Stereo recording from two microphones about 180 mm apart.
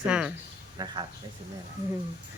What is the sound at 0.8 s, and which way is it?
Speech, 20° right (ahead or behind).